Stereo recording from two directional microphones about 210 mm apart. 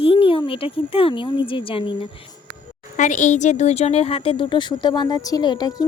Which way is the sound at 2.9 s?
35° left (ahead or behind).